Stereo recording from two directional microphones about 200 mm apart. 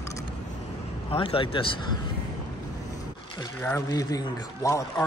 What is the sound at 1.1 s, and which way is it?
Speech, 25° left (ahead or behind).